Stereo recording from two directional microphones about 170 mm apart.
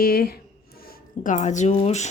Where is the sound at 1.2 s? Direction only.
45° left (ahead or behind).